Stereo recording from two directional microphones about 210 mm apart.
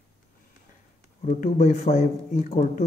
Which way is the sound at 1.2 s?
40° left (ahead or behind).